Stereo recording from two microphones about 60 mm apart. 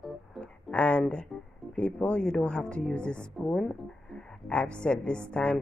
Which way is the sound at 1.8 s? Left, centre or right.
Left.